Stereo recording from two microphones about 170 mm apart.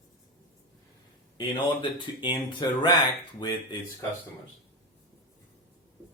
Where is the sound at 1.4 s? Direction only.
25° left (ahead or behind).